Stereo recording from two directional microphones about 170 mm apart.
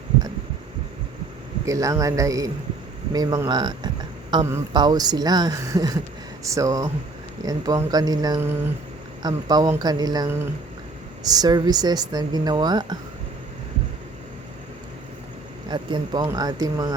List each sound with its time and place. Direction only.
1.6 s a woman's voice: 20° right (ahead or behind)
15.7 s a woman's voice: 25° right (ahead or behind)